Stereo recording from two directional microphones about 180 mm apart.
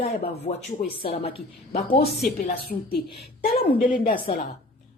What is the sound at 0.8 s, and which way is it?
Speech, 55° left (ahead or behind).